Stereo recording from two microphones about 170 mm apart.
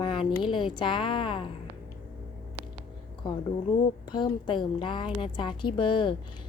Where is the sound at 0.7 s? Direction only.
25° left (ahead or behind).